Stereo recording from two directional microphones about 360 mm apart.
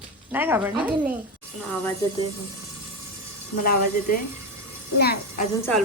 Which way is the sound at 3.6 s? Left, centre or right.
Left.